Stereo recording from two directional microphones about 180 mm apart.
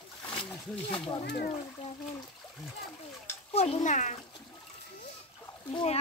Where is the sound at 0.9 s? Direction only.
30° left (ahead or behind).